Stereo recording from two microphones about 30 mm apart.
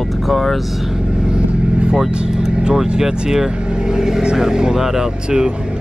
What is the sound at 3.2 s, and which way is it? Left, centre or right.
Speech, centre.